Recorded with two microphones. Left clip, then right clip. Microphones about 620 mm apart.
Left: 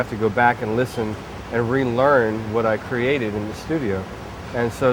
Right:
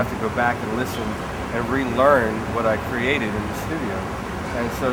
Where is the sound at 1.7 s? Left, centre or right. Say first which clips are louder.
Even; left.